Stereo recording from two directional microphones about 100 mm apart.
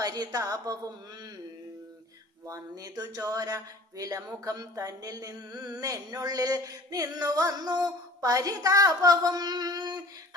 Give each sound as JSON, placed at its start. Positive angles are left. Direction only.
{"t": 0.0, "sound": "speech", "side_deg": -40}
{"t": 2.5, "sound": "speech", "side_deg": -40}